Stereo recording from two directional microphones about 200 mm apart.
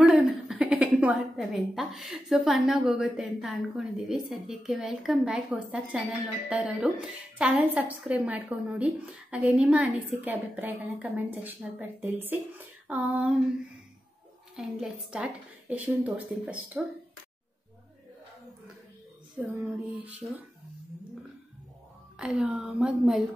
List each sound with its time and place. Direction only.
0.0 s a woman's voice: 5° right (ahead or behind)
14.5 s a woman's voice: 5° right (ahead or behind)
19.3 s a woman's voice: 5° right (ahead or behind)
22.2 s a woman's voice: 5° right (ahead or behind)